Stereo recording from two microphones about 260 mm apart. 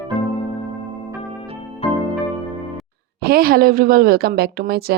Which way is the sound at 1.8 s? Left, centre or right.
Left.